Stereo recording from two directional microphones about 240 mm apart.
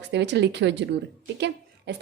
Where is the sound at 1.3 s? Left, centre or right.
Right.